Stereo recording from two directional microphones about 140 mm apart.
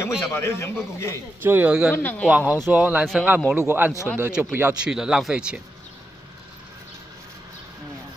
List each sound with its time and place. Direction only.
0.0 s a man's voice: 20° left (ahead or behind)
1.4 s a man's voice: 15° right (ahead or behind)
2.0 s a man's voice: 10° left (ahead or behind)
2.2 s a man's voice: 10° right (ahead or behind)